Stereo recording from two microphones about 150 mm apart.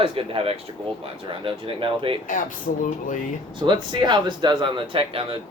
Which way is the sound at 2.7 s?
60° left (ahead or behind).